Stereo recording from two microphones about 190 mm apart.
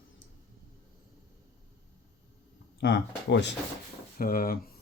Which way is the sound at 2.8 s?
65° left (ahead or behind).